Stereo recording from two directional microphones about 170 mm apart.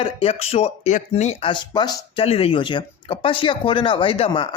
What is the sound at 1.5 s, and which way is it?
Speech, 25° left (ahead or behind).